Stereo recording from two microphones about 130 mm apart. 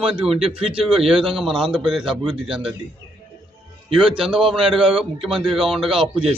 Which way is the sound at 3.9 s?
40° right (ahead or behind).